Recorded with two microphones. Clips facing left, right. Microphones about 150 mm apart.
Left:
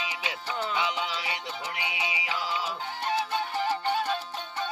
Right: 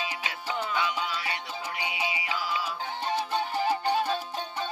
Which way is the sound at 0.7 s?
20° left (ahead or behind).